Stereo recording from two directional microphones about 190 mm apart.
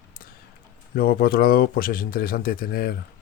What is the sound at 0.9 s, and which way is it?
Speech, 50° left (ahead or behind).